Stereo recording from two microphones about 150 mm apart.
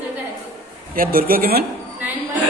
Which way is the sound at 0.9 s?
75° right (ahead or behind).